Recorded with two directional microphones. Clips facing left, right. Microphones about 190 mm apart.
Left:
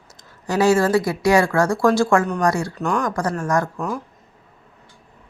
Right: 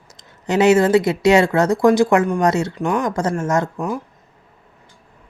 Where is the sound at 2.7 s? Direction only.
10° right (ahead or behind).